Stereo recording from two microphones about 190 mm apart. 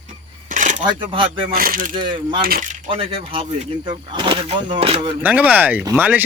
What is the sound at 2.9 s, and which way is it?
Speech, 30° right (ahead or behind).